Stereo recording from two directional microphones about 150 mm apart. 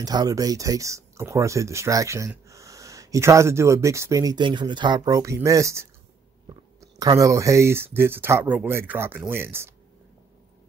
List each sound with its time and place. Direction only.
0.0 s speech: 25° right (ahead or behind)